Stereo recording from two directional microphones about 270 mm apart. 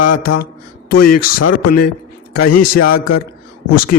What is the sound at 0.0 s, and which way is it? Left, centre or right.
Speech, left.